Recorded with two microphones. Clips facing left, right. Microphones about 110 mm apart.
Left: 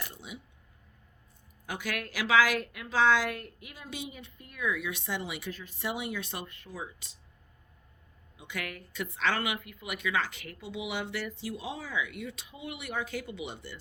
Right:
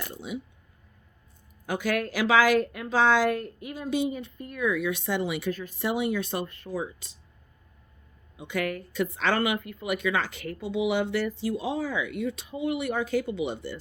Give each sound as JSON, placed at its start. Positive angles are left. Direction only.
{"t": 0.0, "sound": "a sound", "side_deg": -50}
{"t": 1.6, "sound": "a woman's voice", "side_deg": -40}
{"t": 8.4, "sound": "a woman's voice", "side_deg": -40}